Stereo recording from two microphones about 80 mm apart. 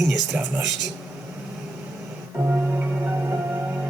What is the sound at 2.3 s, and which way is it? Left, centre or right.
Music, right.